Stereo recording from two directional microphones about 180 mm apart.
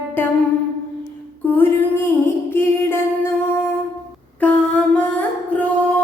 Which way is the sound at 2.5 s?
10° left (ahead or behind).